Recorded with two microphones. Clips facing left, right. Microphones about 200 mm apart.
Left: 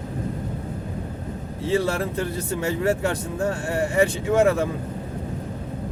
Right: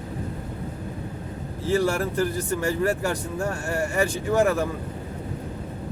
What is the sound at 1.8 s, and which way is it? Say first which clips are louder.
Speech: right 2 dB; 25° left (ahead or behind).